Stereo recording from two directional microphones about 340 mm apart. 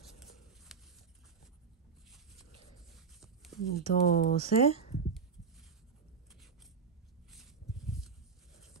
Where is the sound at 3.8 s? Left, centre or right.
Left.